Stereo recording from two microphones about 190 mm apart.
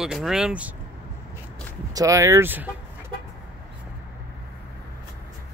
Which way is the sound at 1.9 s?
15° right (ahead or behind).